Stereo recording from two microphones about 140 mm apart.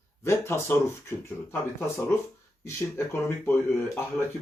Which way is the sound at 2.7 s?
20° left (ahead or behind).